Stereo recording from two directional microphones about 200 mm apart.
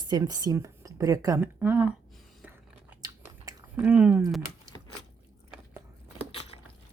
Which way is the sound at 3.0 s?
15° right (ahead or behind).